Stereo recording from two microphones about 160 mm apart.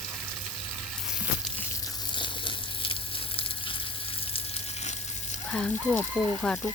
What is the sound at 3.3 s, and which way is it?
Water, 35° left (ahead or behind).